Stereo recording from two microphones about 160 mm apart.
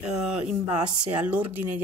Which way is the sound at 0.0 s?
5° right (ahead or behind).